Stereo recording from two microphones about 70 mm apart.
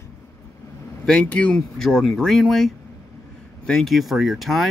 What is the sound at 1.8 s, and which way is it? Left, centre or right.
Speech, centre.